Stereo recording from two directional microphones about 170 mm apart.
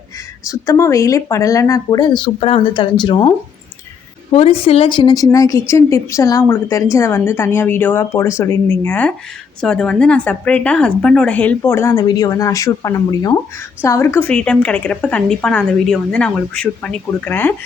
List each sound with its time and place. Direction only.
0.4 s a woman's voice: 20° left (ahead or behind)